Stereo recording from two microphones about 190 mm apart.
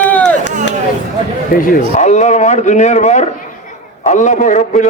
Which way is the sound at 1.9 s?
40° left (ahead or behind).